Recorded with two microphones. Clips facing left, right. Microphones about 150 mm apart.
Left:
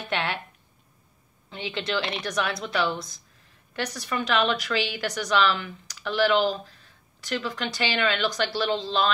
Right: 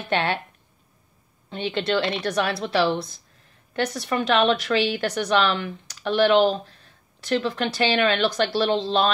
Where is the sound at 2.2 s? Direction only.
30° right (ahead or behind).